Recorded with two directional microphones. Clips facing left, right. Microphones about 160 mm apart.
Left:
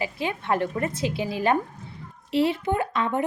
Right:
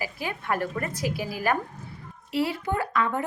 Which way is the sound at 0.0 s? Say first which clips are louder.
Left 4 dB; 25° left (ahead or behind).